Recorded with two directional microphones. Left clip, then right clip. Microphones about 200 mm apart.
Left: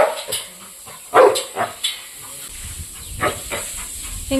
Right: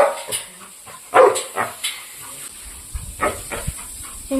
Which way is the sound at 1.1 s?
10° left (ahead or behind).